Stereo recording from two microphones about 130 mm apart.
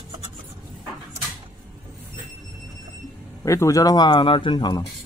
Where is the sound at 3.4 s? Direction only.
25° left (ahead or behind).